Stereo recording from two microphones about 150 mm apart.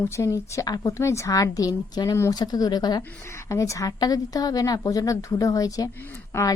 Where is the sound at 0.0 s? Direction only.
20° left (ahead or behind).